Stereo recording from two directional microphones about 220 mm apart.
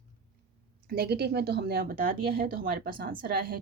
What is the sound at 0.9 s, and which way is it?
Speech, 45° right (ahead or behind).